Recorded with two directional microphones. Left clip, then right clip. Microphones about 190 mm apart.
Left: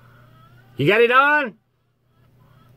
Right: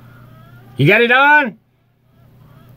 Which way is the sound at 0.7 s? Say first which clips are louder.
Right 4 dB; 20° left (ahead or behind).